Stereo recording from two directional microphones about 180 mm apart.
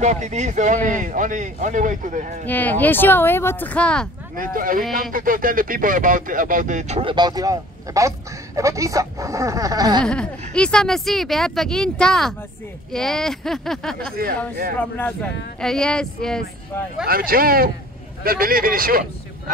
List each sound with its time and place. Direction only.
0.0 s speech: 40° right (ahead or behind)
2.4 s speech: 10° left (ahead or behind)
4.4 s speech: 50° right (ahead or behind); by 10.0 s 20° right (ahead or behind)
10.0 s speech: 5° left (ahead or behind)
17.0 s speech: 55° right (ahead or behind)